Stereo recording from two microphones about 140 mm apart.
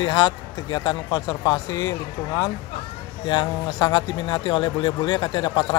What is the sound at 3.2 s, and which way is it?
Speech, 35° left (ahead or behind).